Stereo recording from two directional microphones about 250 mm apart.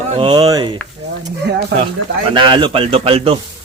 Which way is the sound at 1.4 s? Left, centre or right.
Right.